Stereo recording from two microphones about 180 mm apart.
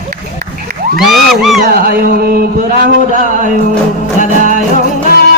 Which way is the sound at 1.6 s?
55° right (ahead or behind).